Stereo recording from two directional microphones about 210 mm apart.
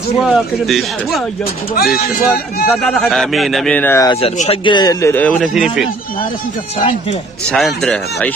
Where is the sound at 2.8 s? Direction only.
Centre (ahead or behind).